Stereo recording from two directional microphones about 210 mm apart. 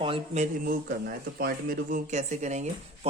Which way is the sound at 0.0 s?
25° right (ahead or behind).